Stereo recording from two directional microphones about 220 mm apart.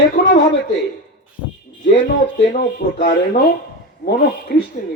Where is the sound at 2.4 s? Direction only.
45° left (ahead or behind).